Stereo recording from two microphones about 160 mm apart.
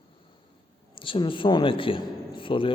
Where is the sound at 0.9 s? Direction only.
30° left (ahead or behind).